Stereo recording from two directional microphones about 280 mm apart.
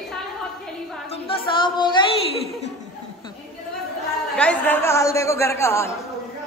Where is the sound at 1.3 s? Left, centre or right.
Centre.